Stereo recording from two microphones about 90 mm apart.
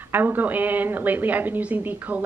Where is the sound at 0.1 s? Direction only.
20° right (ahead or behind).